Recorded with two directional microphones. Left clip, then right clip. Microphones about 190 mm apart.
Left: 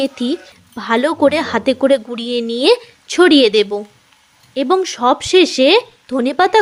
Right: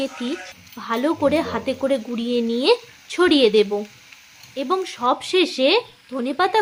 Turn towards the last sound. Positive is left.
turn(degrees=35)  # may be behind; listen again after turning